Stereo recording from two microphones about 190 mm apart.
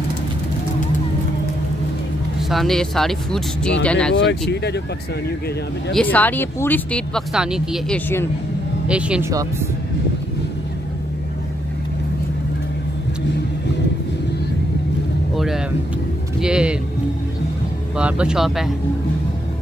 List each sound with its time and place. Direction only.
2.5 s speech: centre (ahead or behind)
4.1 s speech: 65° left (ahead or behind)
5.9 s speech: 10° left (ahead or behind)
15.3 s vehicle: centre (ahead or behind)
16.3 s speech: 5° right (ahead or behind)
17.9 s speech: 5° right (ahead or behind)